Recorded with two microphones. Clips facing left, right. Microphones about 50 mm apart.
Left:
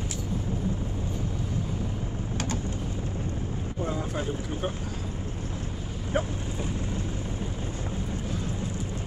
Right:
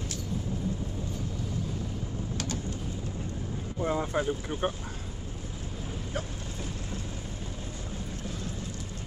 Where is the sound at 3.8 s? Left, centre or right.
Right.